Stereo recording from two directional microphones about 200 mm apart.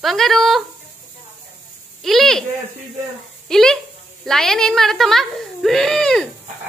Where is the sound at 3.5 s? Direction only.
Centre (ahead or behind).